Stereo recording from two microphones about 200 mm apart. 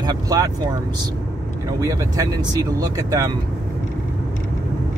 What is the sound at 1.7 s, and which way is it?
Speech, 15° right (ahead or behind).